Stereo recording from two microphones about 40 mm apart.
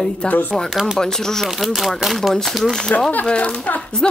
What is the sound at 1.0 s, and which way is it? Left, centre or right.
Speech, centre.